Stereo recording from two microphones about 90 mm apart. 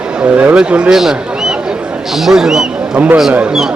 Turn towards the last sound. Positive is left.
turn(degrees=-10)  # may be behind; listen again after turning